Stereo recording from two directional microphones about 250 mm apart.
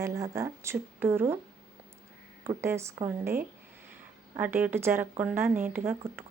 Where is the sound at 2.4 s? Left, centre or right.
Centre.